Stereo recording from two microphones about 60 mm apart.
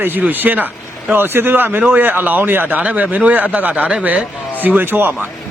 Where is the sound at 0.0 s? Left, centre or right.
Right.